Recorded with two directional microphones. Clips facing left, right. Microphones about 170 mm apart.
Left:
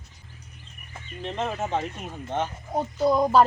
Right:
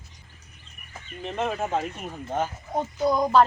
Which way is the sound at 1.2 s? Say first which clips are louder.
Right 1 dB; 5° right (ahead or behind).